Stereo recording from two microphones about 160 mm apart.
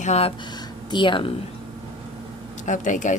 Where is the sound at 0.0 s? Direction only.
40° left (ahead or behind).